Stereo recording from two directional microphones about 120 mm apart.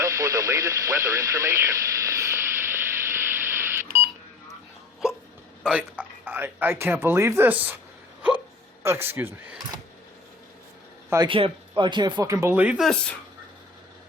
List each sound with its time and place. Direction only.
0.0 s radio: 25° right (ahead or behind)
5.6 s a man's voice: 10° right (ahead or behind)
8.8 s speech: 20° right (ahead or behind)
11.3 s speech: 45° right (ahead or behind); by 12.5 s 25° right (ahead or behind)
12.5 s a man's voice: 5° right (ahead or behind)